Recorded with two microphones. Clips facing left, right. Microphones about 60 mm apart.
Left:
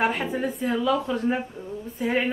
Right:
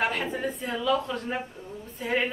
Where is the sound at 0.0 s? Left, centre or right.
Centre.